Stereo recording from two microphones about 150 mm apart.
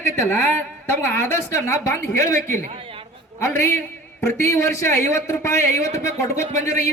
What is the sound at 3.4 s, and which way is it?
A woman's voice, 15° left (ahead or behind).